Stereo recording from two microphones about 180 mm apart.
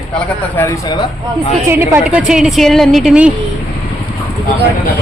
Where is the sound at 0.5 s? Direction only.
15° left (ahead or behind).